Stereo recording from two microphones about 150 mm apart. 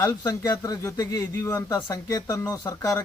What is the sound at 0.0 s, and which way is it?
Speech, 25° left (ahead or behind).